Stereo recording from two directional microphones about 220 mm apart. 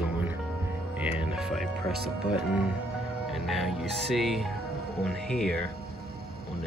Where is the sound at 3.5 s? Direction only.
Centre (ahead or behind).